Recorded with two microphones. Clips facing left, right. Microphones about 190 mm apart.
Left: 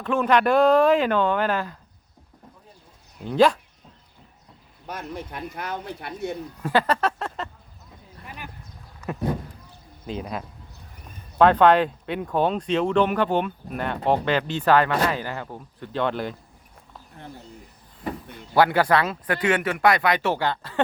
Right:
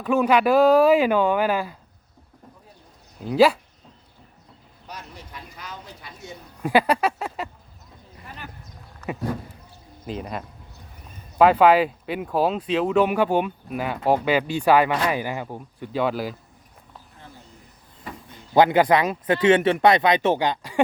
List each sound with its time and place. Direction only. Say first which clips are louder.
0.0 s speech: right 2 dB; 5° right (ahead or behind)
3.2 s speech: right 1 dB; 5° right (ahead or behind)
4.9 s speech: left 7 dB; 55° left (ahead or behind)
6.6 s speech: right 3 dB; 15° right (ahead or behind)
8.2 s sheep: left 1 dB; 10° left (ahead or behind)
9.0 s a sound: right 1 dB; 10° left (ahead or behind)
10.1 s speech: even; centre (ahead or behind)
18.5 s speech: right 2 dB; 20° right (ahead or behind)